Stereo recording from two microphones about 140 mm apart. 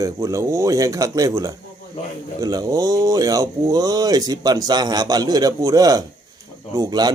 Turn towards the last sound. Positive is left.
turn(degrees=-30)  # may be behind; listen again after turning